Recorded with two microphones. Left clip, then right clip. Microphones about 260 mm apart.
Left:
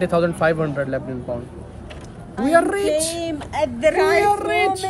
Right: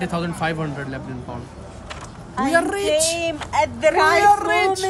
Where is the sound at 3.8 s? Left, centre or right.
Right.